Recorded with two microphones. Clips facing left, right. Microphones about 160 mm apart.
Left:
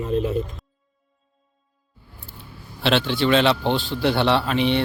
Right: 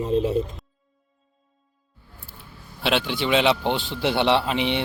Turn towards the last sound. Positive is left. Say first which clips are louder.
# left 2 dB
turn(degrees=-15)  # may be behind; listen again after turning